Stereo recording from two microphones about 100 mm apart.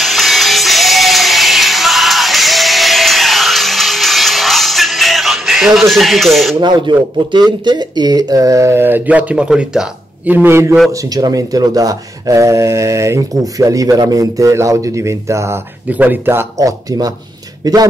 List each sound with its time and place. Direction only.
0.0 s music: centre (ahead or behind)
6.6 s speech: 50° right (ahead or behind); by 10.8 s 25° right (ahead or behind)
10.9 s speech: 35° right (ahead or behind)
15.9 s speech: 20° right (ahead or behind)
16.5 s speech: 40° right (ahead or behind)